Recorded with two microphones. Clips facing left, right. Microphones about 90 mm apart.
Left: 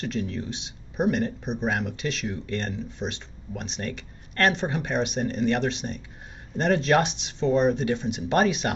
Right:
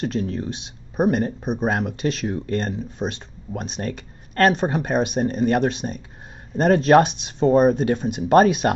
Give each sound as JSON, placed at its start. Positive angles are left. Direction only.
{"t": 0.0, "sound": "speech", "side_deg": -40}